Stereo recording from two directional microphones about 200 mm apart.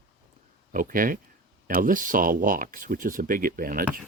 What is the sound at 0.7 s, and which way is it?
Speech, 45° right (ahead or behind).